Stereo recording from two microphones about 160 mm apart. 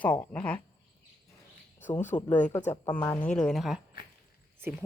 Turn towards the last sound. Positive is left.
turn(degrees=-15)  # may be behind; listen again after turning